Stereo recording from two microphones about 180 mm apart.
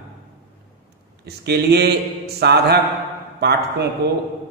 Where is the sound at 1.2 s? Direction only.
65° right (ahead or behind).